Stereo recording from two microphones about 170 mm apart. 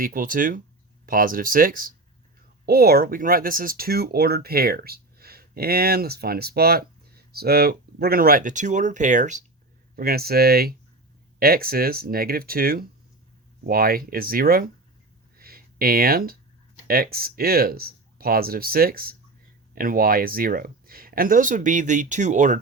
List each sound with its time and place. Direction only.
0.0 s speech: 55° right (ahead or behind)
9.9 s speech: 65° right (ahead or behind)
15.4 s a sound: 60° right (ahead or behind)
16.8 s speech: 60° right (ahead or behind)